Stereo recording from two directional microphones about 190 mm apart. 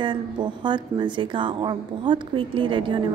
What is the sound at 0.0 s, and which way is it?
A woman's voice, 25° right (ahead or behind).